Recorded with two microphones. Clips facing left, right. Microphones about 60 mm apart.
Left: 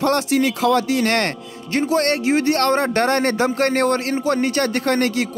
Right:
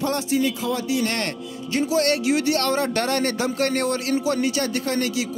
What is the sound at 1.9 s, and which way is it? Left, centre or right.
A man's voice, left.